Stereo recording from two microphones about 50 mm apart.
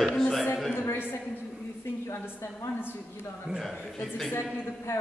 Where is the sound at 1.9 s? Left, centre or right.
Left.